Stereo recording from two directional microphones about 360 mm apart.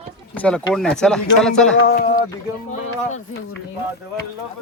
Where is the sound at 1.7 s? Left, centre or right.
Left.